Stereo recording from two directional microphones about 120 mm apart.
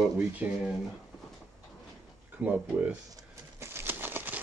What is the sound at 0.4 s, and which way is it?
Speech, 15° right (ahead or behind).